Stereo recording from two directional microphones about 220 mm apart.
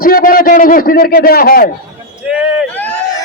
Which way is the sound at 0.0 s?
40° left (ahead or behind).